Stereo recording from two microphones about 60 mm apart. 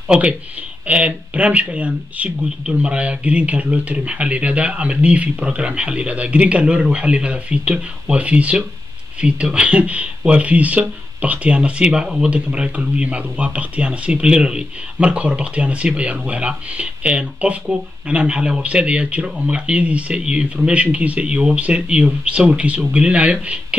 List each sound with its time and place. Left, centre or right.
0.1 s speech: right